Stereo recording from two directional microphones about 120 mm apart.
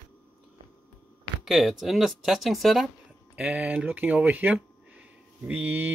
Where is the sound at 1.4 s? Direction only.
Centre (ahead or behind).